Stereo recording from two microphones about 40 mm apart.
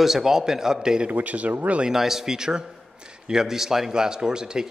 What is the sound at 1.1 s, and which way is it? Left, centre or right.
Speech, right.